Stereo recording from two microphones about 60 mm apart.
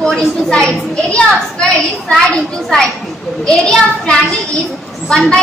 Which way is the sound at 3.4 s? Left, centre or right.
Centre.